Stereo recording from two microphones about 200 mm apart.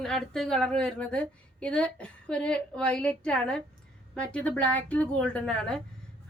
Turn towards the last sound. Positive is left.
turn(degrees=5)  # may be behind; listen again after turning